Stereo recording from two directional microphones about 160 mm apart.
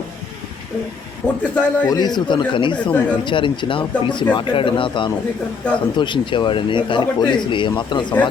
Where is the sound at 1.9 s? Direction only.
25° left (ahead or behind).